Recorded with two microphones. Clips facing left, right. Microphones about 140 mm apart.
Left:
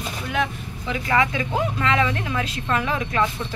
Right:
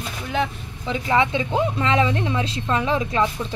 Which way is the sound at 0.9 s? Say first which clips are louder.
Right 2 dB; 25° right (ahead or behind).